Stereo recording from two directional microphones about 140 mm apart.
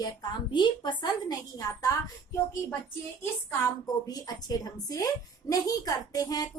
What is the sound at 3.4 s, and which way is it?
A woman's voice, 25° left (ahead or behind).